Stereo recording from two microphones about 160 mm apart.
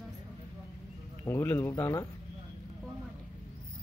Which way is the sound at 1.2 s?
15° left (ahead or behind).